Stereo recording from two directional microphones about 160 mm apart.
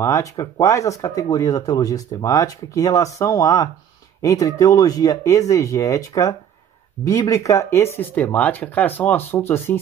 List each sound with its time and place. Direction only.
0.0 s speech: 20° left (ahead or behind)